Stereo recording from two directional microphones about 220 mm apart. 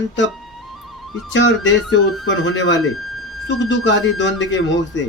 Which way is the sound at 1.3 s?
55° left (ahead or behind).